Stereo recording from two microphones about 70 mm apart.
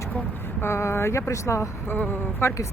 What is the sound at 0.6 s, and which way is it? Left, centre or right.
Speech, left.